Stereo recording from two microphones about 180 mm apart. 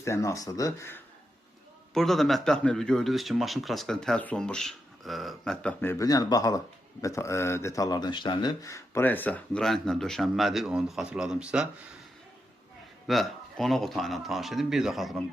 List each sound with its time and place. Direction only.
0.0 s speech: 15° left (ahead or behind)
1.9 s speech: centre (ahead or behind)
13.1 s speech: centre (ahead or behind)